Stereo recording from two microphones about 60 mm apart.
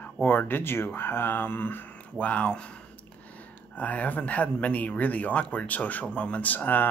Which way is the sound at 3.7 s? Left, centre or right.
Left.